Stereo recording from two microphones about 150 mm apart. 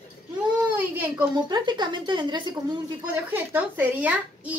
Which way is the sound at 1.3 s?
30° right (ahead or behind).